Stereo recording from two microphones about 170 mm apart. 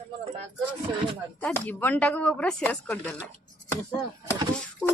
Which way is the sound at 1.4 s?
10° left (ahead or behind).